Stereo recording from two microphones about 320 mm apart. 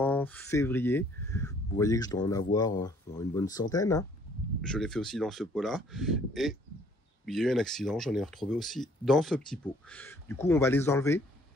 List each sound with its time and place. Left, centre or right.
0.0 s speech: centre